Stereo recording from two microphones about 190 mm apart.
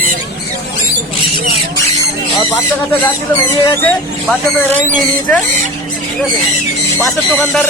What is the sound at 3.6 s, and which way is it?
Speech, 10° left (ahead or behind).